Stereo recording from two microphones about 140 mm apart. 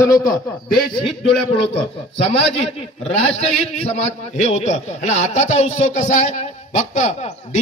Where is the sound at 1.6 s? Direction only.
40° left (ahead or behind).